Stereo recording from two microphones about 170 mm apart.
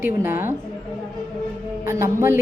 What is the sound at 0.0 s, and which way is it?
Speech, 15° right (ahead or behind).